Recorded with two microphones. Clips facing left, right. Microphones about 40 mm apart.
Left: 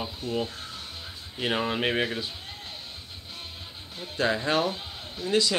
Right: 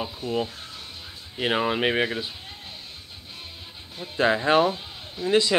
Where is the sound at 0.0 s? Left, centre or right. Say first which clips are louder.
Right 3 dB; centre.